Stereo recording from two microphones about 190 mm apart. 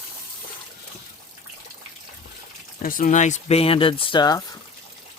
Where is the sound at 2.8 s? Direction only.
45° left (ahead or behind); by 4.4 s 20° left (ahead or behind).